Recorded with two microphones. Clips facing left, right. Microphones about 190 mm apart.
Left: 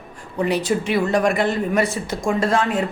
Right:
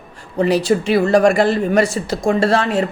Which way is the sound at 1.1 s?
85° right.